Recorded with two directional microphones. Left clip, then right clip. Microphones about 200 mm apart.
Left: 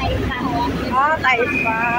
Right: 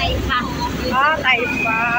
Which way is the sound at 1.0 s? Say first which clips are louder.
Even; 15° left (ahead or behind).